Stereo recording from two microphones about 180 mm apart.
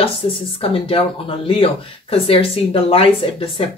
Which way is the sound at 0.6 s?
30° left (ahead or behind).